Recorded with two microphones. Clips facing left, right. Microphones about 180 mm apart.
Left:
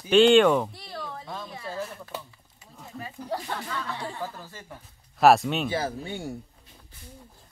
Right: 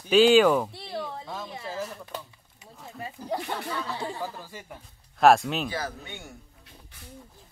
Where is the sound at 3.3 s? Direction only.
15° right (ahead or behind).